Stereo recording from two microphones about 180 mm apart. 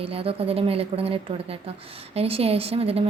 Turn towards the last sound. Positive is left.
turn(degrees=-35)  # may be behind; listen again after turning